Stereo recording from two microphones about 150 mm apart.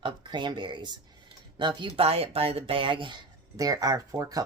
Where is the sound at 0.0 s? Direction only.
30° right (ahead or behind).